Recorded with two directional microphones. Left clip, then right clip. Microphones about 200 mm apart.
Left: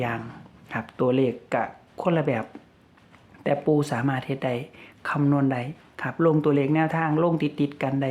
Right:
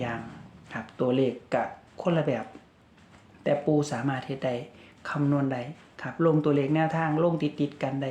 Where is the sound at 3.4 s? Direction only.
35° left (ahead or behind).